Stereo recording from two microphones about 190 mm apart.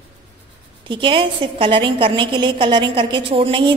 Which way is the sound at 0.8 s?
25° right (ahead or behind).